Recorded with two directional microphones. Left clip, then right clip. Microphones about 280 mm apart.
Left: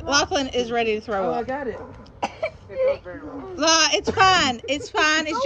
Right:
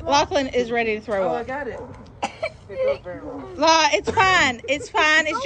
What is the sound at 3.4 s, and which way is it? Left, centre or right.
Speech, centre.